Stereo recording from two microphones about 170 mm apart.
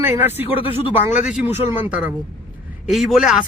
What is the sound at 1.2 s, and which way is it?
Speech, 5° right (ahead or behind).